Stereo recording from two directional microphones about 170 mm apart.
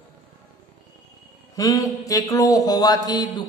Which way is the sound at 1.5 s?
20° left (ahead or behind).